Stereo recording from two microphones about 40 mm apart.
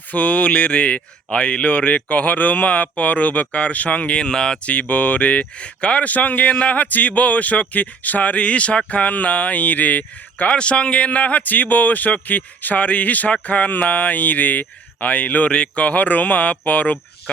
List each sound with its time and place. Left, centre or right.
0.1 s speech: left
4.2 s speech: left
4.6 s speech: left
10.5 s speech: left
15.4 s speech: left